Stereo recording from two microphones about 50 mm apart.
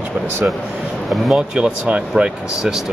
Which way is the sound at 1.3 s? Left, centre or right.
Centre.